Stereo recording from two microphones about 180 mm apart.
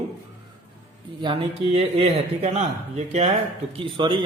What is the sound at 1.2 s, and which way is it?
A man's voice, 30° right (ahead or behind).